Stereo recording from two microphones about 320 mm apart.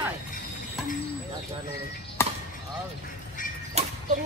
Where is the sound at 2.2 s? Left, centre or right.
Centre.